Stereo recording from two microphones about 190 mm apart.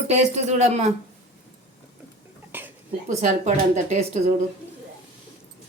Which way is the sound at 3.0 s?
40° right (ahead or behind).